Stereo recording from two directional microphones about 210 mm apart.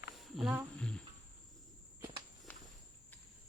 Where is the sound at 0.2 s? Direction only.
Centre (ahead or behind).